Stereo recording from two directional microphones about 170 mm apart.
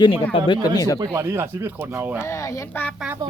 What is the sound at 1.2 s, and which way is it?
Speech, 15° right (ahead or behind).